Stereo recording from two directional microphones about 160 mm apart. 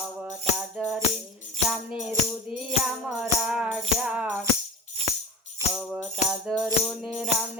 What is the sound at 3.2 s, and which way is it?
Music, 5° right (ahead or behind).